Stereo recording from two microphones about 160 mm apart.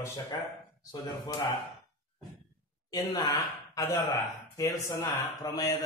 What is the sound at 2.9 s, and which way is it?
Speech, 25° left (ahead or behind).